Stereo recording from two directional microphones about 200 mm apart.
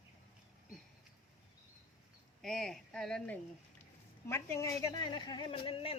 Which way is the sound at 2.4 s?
Centre (ahead or behind).